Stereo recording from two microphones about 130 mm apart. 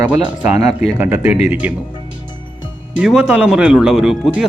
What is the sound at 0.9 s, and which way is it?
Speech, 15° right (ahead or behind).